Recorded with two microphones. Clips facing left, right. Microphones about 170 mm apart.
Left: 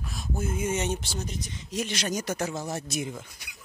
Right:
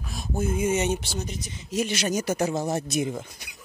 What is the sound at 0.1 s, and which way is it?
Speech, 20° right (ahead or behind).